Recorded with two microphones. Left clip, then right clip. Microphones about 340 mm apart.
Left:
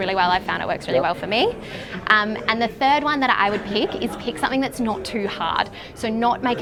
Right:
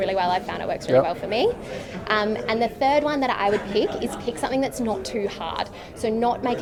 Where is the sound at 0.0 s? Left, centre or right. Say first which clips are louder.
Left 3 dB; left.